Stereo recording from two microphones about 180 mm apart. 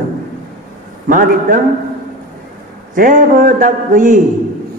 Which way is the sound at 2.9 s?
50° right (ahead or behind).